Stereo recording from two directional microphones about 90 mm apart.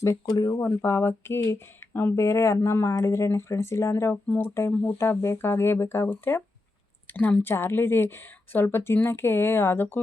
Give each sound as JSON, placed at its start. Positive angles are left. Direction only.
{"t": 0.0, "sound": "speech", "side_deg": 35}
{"t": 0.6, "sound": "a woman's voice", "side_deg": 30}
{"t": 4.7, "sound": "speech", "side_deg": 15}
{"t": 4.9, "sound": "a woman's voice", "side_deg": 30}